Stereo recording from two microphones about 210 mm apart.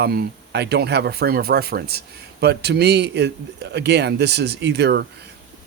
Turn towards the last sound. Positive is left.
turn(degrees=-55)  # may be behind; listen again after turning